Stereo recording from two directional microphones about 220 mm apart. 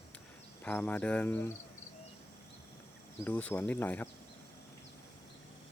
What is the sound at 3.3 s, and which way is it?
Speech, 10° left (ahead or behind).